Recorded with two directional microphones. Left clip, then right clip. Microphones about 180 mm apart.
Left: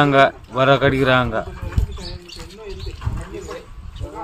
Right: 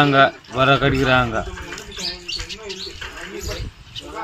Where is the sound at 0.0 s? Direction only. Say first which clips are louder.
Even; 20° left (ahead or behind).